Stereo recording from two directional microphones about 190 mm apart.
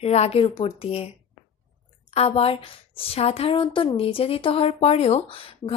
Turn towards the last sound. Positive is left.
turn(degrees=30)  # may be behind; listen again after turning